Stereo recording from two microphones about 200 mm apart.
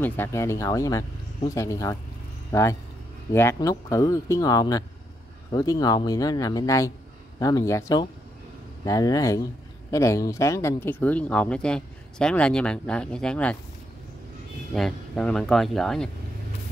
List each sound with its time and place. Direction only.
0.0 s speech: 10° left (ahead or behind)
14.7 s speech: centre (ahead or behind)